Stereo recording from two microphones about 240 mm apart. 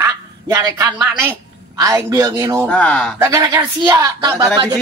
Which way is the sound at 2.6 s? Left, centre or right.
Centre.